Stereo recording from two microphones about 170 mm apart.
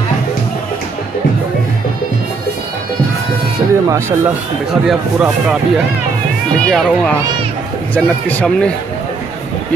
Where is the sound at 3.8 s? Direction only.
15° right (ahead or behind).